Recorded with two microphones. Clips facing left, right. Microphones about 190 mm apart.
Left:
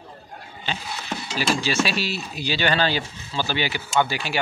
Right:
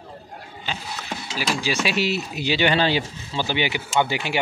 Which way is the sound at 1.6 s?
15° right (ahead or behind).